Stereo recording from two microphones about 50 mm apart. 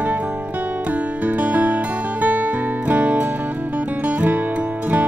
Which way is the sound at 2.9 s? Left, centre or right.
Right.